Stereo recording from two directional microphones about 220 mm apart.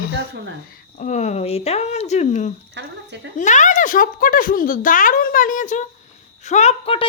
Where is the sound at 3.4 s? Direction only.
35° left (ahead or behind).